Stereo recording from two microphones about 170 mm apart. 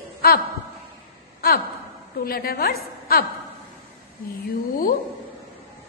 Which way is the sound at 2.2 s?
60° left (ahead or behind).